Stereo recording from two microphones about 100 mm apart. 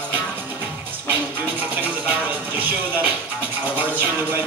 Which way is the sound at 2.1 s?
15° right (ahead or behind).